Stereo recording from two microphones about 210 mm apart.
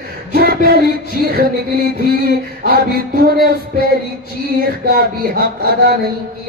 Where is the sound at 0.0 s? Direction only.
45° right (ahead or behind).